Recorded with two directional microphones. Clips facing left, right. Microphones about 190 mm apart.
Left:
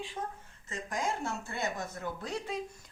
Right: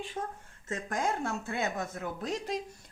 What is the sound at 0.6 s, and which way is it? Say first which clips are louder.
Speech: right 3 dB; 55° right (ahead or behind).